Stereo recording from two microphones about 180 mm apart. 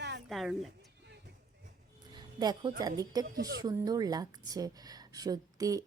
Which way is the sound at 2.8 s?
20° right (ahead or behind).